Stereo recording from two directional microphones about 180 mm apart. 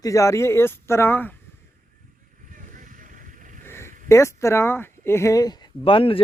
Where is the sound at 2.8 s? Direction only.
45° right (ahead or behind).